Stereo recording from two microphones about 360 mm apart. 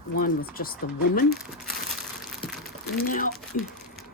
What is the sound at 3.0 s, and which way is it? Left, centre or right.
Speech, left.